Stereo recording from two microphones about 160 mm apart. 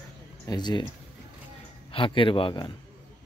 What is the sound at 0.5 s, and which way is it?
Speech, 25° left (ahead or behind).